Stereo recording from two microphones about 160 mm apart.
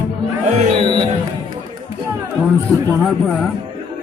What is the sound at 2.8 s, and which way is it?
Speech, 10° left (ahead or behind).